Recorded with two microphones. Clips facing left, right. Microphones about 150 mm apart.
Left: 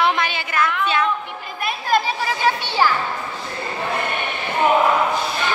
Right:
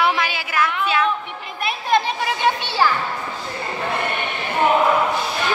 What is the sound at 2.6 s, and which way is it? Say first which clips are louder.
Speech: even; 15° left (ahead or behind).